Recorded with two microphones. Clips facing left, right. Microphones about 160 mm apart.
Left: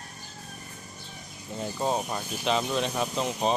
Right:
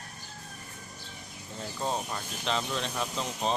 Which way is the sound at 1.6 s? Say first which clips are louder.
Left 5 dB; 15° left (ahead or behind).